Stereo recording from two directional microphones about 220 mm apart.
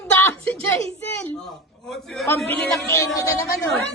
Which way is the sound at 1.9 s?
5° left (ahead or behind).